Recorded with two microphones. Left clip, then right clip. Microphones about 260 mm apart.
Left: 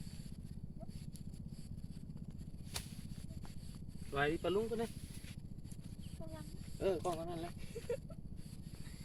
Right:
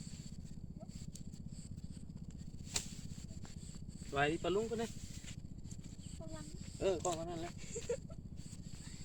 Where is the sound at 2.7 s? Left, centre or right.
Right.